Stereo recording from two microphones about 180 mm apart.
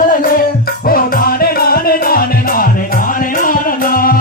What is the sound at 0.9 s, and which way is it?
Music, 55° left (ahead or behind).